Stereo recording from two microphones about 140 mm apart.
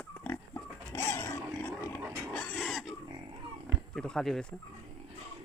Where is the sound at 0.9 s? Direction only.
20° left (ahead or behind).